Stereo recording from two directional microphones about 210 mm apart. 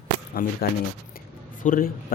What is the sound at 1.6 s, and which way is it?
Speech, 40° left (ahead or behind).